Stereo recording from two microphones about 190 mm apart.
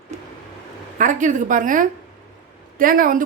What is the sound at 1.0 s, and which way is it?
Speech, 40° right (ahead or behind).